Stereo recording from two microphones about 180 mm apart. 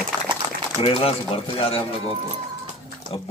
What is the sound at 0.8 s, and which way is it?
A man's voice, 30° left (ahead or behind).